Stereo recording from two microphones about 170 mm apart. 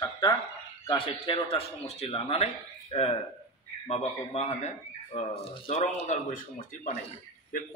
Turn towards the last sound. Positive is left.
turn(degrees=55)  # may be behind; listen again after turning